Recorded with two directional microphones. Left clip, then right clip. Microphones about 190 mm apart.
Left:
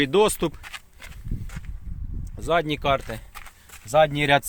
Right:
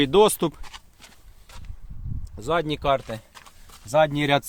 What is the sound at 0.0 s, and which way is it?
Speech, 20° right (ahead or behind).